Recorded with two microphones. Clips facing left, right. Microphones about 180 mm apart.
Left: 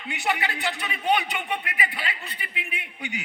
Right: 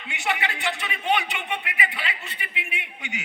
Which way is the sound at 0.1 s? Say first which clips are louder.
Left 1 dB; 40° left (ahead or behind).